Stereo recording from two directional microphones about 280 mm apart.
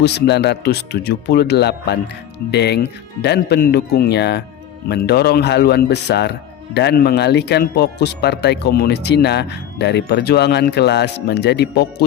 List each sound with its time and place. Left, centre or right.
0.0 s speech: left